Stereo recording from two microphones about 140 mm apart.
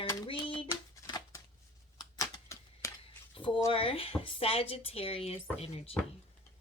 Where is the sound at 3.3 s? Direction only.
40° left (ahead or behind).